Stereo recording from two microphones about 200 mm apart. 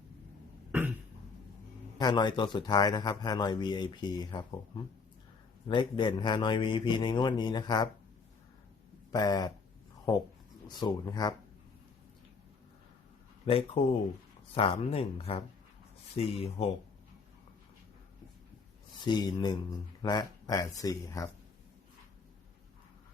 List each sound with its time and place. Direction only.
0.7 s cough: 10° right (ahead or behind)
2.0 s a man's voice: 20° left (ahead or behind)
5.6 s a man's voice: 25° left (ahead or behind)
9.1 s a man's voice: 20° left (ahead or behind)
10.7 s a man's voice: 20° left (ahead or behind)
13.4 s a man's voice: 30° left (ahead or behind)
19.0 s a man's voice: 20° left (ahead or behind)